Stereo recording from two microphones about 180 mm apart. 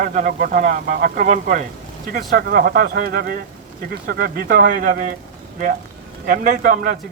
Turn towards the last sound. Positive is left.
turn(degrees=-50)  # may be behind; listen again after turning